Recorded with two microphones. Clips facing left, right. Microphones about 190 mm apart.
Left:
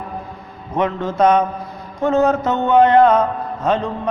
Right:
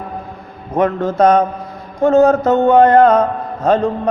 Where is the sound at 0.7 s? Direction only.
45° right (ahead or behind).